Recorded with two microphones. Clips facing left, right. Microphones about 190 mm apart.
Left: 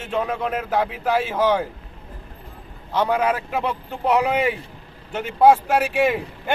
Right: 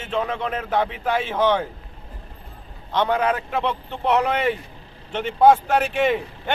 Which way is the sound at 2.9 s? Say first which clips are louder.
Even; 5° left (ahead or behind).